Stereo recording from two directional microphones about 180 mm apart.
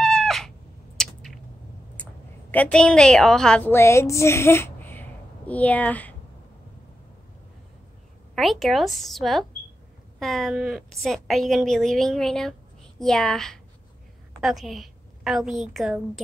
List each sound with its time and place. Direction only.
0.0 s cat: 5° left (ahead or behind)
0.9 s a sound: centre (ahead or behind)
2.5 s a woman's voice: 5° left (ahead or behind)
8.4 s a woman's voice: centre (ahead or behind)